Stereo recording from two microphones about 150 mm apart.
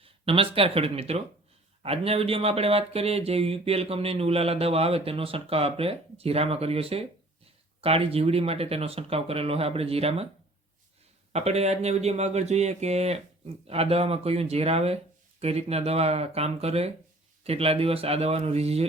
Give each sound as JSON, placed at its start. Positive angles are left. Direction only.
{"t": 0.0, "sound": "speech", "side_deg": -40}
{"t": 11.3, "sound": "speech", "side_deg": -45}